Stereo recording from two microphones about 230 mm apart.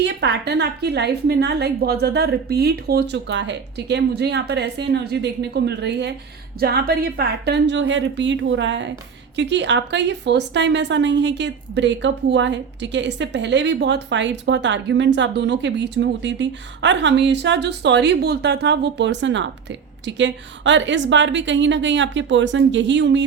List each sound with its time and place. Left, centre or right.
0.0 s a woman's voice: right